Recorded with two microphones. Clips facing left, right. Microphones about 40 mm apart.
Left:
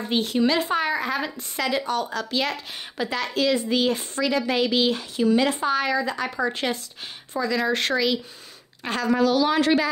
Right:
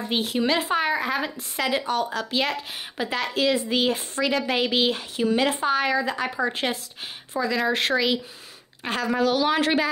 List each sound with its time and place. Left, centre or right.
0.1 s speech: centre
4.6 s speech: right
9.2 s speech: right